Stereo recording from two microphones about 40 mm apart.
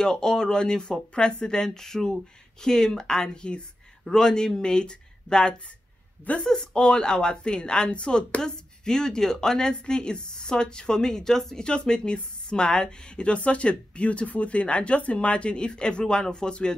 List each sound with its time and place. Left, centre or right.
0.0 s a woman's voice: centre
11.6 s a woman's voice: left